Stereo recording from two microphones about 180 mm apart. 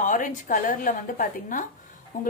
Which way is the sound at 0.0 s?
45° left (ahead or behind).